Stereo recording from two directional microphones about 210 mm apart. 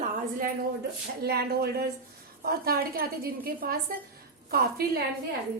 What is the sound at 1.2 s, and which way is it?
A woman's voice, 50° right (ahead or behind).